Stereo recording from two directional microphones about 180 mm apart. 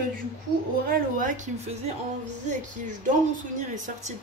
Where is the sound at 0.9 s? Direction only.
45° right (ahead or behind).